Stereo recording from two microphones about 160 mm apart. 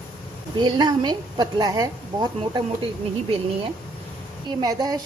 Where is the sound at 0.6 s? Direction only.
30° right (ahead or behind).